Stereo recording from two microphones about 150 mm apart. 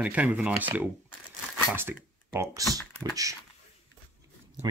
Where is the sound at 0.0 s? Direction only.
10° right (ahead or behind).